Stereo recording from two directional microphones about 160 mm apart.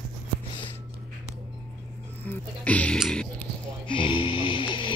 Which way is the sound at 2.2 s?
10° left (ahead or behind).